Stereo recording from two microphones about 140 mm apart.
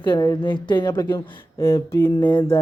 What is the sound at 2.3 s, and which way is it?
Music, 35° left (ahead or behind).